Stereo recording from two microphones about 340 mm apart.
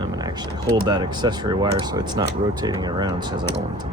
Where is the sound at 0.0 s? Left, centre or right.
Centre.